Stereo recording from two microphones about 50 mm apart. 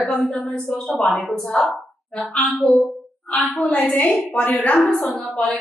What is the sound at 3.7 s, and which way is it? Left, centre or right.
Speech, left.